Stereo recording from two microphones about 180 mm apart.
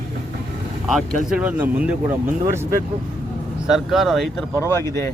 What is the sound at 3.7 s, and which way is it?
Speech, centre (ahead or behind).